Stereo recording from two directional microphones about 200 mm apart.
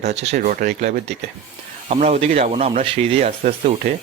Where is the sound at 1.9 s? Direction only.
35° right (ahead or behind).